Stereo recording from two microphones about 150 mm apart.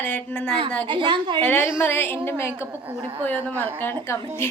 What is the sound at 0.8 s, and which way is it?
Speech, 30° right (ahead or behind).